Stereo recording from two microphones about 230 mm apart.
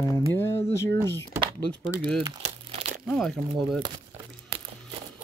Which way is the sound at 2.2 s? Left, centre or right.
Right.